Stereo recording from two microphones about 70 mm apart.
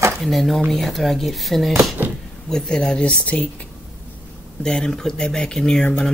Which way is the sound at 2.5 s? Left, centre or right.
Centre.